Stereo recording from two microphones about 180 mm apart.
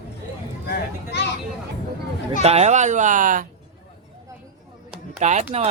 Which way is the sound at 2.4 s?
35° right (ahead or behind).